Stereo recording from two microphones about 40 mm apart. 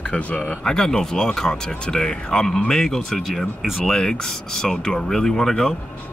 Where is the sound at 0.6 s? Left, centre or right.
Centre.